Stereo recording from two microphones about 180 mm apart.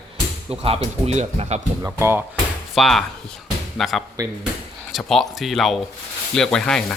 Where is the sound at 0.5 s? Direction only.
30° right (ahead or behind).